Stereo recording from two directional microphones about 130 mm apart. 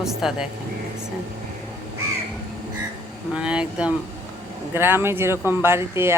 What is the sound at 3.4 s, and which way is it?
A woman's voice, 10° right (ahead or behind).